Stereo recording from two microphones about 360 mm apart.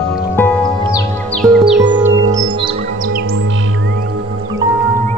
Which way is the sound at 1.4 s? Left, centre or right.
Centre.